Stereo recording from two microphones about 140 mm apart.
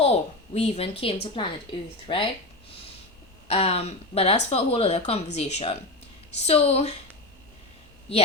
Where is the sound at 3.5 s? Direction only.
45° left (ahead or behind).